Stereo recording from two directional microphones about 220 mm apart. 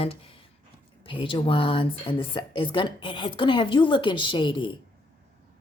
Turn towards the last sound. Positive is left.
turn(degrees=20)  # may be behind; listen again after turning